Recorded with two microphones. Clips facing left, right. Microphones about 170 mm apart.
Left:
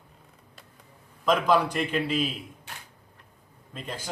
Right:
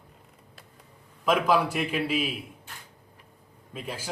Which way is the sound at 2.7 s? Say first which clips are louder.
Left 3 dB; 80° left.